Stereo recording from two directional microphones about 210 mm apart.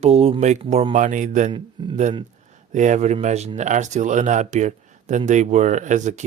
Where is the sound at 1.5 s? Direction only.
20° right (ahead or behind).